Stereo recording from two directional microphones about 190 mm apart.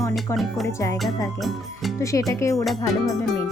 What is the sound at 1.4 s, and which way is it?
Speech, centre (ahead or behind).